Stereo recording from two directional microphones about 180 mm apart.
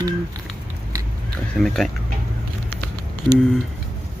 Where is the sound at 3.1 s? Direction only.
5° left (ahead or behind).